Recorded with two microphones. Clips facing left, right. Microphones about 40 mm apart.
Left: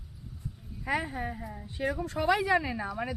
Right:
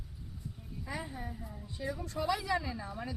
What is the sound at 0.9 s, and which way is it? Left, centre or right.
Speech, left.